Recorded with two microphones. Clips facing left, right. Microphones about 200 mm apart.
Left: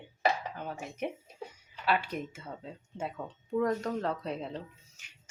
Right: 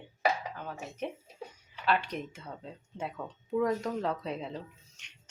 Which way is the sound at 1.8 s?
5° left (ahead or behind).